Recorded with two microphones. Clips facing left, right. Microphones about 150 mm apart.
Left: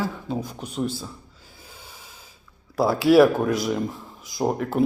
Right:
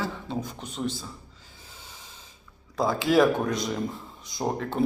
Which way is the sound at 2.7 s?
10° left (ahead or behind).